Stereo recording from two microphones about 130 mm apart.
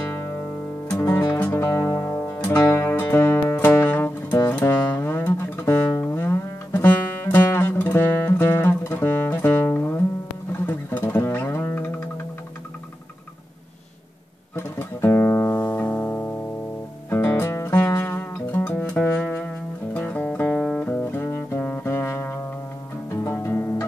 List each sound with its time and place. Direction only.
0.9 s music: 20° left (ahead or behind)
14.5 s music: 20° left (ahead or behind)
20.9 s music: 15° left (ahead or behind)